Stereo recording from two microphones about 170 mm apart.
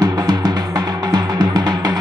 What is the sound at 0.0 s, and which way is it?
Music, 25° right (ahead or behind).